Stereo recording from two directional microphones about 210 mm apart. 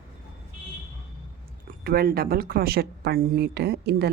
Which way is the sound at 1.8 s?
45° right (ahead or behind).